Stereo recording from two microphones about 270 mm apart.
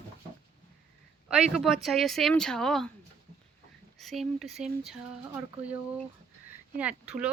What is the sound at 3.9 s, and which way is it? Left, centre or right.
Speech, centre.